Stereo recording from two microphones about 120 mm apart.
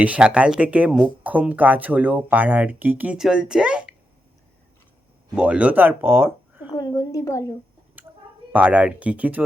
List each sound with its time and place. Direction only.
0.0 s speech: 10° right (ahead or behind)
5.3 s speech: 10° right (ahead or behind)
6.7 s a woman's voice: 35° left (ahead or behind)
8.0 s a sound: 15° right (ahead or behind)
8.5 s speech: 10° right (ahead or behind)